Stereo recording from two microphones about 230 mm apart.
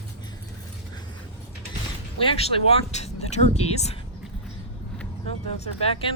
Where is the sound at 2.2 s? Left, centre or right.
Left.